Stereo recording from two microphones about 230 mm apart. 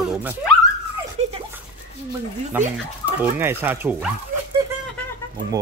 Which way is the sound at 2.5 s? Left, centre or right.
Centre.